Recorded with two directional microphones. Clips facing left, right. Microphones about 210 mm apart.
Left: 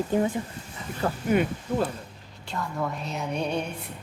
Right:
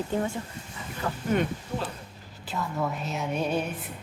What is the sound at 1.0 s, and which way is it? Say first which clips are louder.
Speech: left 4 dB; 35° left (ahead or behind).